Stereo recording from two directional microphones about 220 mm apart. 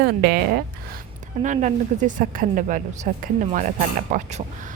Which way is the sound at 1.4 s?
35° right (ahead or behind).